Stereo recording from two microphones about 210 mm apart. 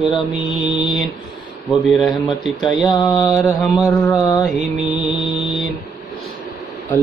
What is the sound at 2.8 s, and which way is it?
Mantra, 15° left (ahead or behind).